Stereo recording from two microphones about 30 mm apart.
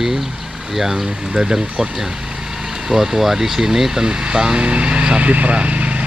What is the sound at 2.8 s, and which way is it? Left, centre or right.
Speech, centre.